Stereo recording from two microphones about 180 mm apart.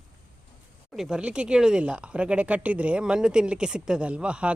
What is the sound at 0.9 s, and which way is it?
Speech, 5° right (ahead or behind).